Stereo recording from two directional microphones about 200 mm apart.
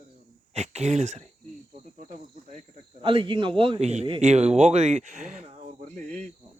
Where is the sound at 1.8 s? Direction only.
40° right (ahead or behind).